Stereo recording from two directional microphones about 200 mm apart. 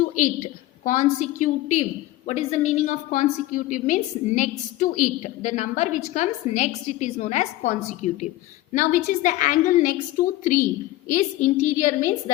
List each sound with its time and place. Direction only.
0.9 s a woman's voice: 40° left (ahead or behind)